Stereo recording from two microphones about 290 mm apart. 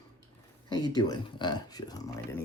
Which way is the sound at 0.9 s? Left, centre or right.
Centre.